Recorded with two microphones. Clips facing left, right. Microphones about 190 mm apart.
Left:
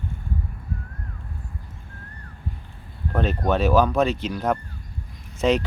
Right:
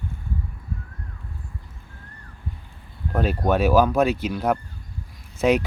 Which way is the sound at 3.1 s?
5° right (ahead or behind).